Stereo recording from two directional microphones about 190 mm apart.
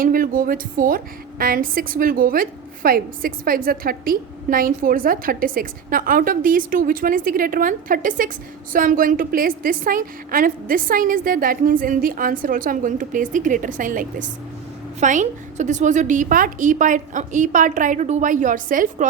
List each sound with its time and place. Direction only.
0.0 s a woman's voice: 50° right (ahead or behind)